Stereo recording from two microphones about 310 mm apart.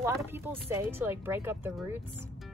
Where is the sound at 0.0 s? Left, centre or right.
Centre.